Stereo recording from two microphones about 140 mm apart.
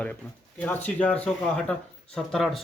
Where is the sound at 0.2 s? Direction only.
15° left (ahead or behind).